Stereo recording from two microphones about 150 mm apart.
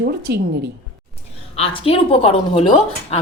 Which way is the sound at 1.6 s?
40° left (ahead or behind).